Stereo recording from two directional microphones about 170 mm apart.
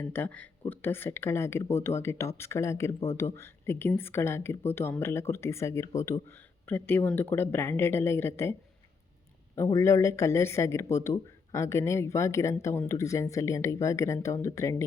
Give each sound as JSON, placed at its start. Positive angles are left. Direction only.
{"t": 0.0, "sound": "speech", "side_deg": 10}
{"t": 9.6, "sound": "speech", "side_deg": 20}